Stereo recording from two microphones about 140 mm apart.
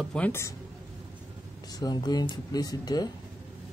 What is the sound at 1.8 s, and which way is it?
Speech, 30° left (ahead or behind).